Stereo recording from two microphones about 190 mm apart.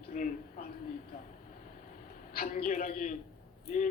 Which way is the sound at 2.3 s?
50° left (ahead or behind).